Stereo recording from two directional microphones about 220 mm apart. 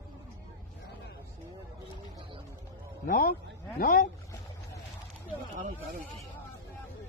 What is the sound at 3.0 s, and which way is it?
A man's voice, 40° left (ahead or behind).